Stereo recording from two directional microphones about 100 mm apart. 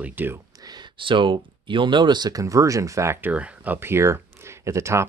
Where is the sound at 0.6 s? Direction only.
45° right (ahead or behind).